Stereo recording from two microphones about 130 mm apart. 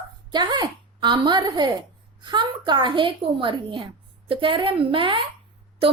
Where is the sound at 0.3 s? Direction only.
35° right (ahead or behind).